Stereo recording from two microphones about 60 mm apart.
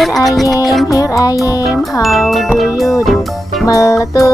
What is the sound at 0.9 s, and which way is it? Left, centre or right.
Music, left.